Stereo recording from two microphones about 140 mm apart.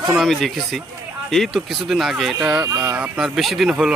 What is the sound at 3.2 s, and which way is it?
Speech, centre (ahead or behind).